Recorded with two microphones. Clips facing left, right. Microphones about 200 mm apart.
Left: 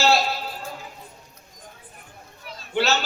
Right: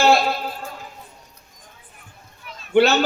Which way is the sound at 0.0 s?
55° right (ahead or behind).